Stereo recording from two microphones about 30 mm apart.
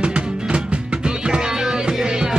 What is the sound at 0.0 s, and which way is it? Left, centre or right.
Music, right.